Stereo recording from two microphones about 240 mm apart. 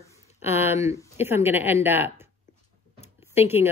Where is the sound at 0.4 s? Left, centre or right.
Centre.